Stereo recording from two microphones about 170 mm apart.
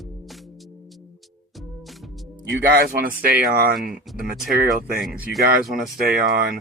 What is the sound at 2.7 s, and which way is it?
Speech, 65° right (ahead or behind).